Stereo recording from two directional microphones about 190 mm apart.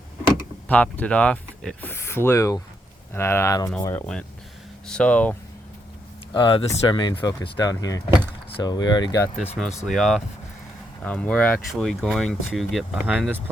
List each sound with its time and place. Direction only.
0.7 s speech: 5° left (ahead or behind)
6.3 s speech: 25° left (ahead or behind)
9.8 s speech: centre (ahead or behind)